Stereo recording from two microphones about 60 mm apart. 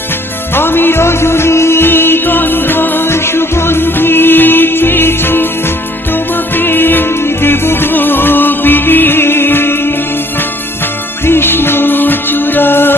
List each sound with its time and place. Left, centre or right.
0.5 s music: left
6.6 s music: left
11.3 s music: left